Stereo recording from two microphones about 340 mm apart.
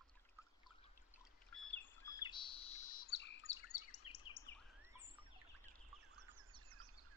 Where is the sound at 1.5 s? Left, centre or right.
Centre; by 4.4 s left.